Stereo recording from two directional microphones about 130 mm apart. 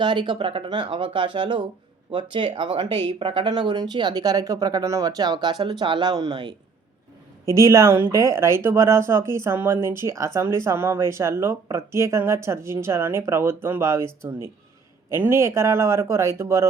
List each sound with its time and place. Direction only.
0.0 s speech: 35° right (ahead or behind)
7.4 s speech: 25° right (ahead or behind)